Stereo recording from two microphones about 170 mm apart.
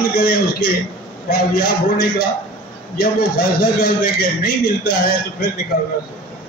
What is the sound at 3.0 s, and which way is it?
A man's voice, 65° left (ahead or behind).